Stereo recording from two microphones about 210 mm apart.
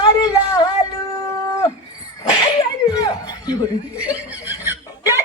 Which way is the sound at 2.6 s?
15° left (ahead or behind).